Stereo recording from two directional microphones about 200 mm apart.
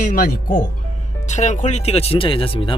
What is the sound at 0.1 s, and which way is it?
Speech, 45° left (ahead or behind).